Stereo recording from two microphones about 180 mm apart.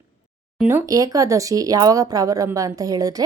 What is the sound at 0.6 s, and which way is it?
Speech, 15° right (ahead or behind).